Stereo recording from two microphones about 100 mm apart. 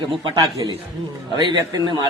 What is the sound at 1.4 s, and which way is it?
Speech, 45° right (ahead or behind).